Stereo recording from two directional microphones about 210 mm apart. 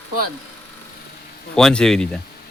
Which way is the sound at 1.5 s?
Centre (ahead or behind).